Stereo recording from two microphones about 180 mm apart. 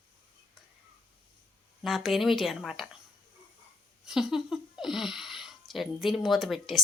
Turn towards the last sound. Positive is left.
turn(degrees=0)  # may be behind; listen again after turning